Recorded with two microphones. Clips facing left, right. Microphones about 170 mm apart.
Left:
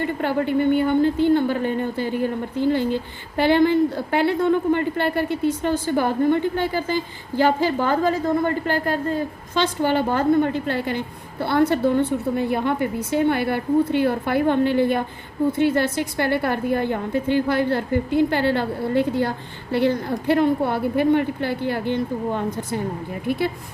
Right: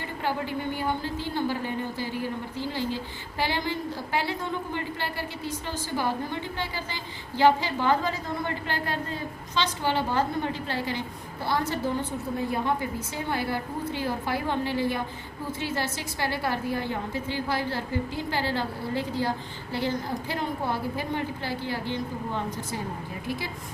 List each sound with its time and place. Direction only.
0.0 s a woman's voice: 60° left (ahead or behind)